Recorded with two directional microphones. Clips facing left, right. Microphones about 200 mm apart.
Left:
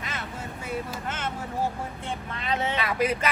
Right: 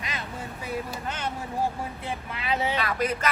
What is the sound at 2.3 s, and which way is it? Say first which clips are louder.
Speech: right 1 dB; 5° right (ahead or behind).